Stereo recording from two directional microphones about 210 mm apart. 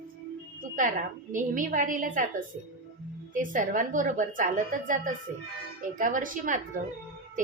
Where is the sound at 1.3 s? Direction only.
40° right (ahead or behind).